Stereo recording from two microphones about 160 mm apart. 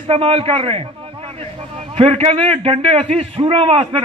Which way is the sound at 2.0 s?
40° right (ahead or behind).